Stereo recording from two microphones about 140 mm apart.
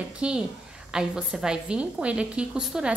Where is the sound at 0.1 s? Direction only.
5° right (ahead or behind).